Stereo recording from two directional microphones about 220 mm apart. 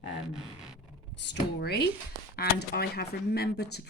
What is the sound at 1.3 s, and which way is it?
Speech, 45° left (ahead or behind).